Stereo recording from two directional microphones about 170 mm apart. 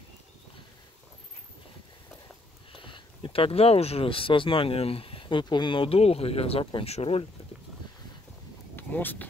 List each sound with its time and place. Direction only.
2.7 s speech: 30° left (ahead or behind)
8.7 s vehicle: 10° left (ahead or behind)